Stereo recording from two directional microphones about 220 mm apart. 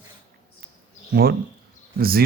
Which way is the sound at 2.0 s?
45° right (ahead or behind).